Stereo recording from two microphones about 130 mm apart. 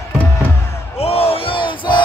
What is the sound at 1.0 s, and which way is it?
Battle cry, 50° left (ahead or behind).